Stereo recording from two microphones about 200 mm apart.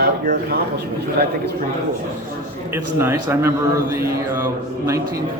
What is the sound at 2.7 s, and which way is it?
A man's voice, 10° right (ahead or behind).